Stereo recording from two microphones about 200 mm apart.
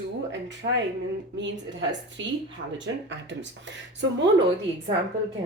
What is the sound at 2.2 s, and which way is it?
A woman's voice, 65° right (ahead or behind).